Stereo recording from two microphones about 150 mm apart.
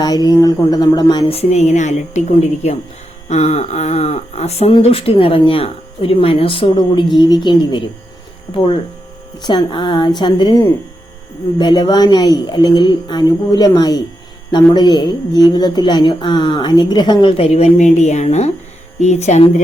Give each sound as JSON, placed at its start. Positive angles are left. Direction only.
{"t": 0.0, "sound": "a woman's voice", "side_deg": 25}
{"t": 1.4, "sound": "a woman's voice", "side_deg": 50}
{"t": 11.5, "sound": "a woman's voice", "side_deg": 30}